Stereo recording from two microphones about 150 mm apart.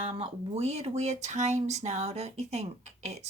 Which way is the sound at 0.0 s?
40° right (ahead or behind).